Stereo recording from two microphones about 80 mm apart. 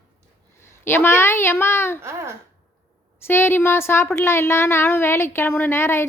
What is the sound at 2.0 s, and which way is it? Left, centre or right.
Speech, right.